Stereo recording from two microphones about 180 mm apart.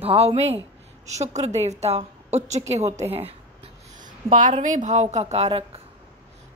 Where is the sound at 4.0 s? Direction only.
45° right (ahead or behind).